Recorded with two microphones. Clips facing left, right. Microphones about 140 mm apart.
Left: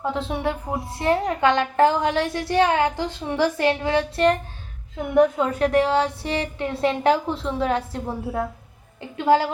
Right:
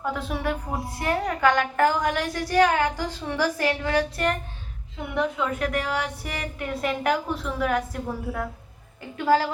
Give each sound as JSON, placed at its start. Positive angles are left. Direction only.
{"t": 0.0, "sound": "a woman's voice", "side_deg": 25}
{"t": 5.1, "sound": "a woman's voice", "side_deg": 40}